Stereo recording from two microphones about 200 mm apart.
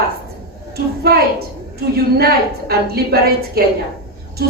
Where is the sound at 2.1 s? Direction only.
50° right (ahead or behind).